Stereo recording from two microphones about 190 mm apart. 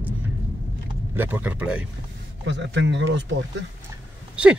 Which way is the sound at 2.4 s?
70° right (ahead or behind).